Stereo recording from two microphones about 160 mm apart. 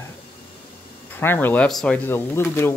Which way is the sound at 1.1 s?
15° left (ahead or behind).